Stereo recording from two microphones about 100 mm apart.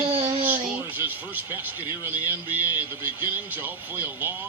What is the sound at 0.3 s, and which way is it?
Speech, 20° right (ahead or behind).